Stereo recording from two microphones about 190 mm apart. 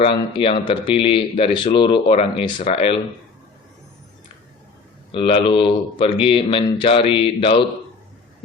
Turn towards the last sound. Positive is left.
turn(degrees=30)  # may be behind; listen again after turning